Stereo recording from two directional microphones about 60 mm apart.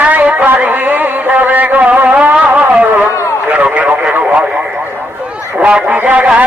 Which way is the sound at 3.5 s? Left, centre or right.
Right.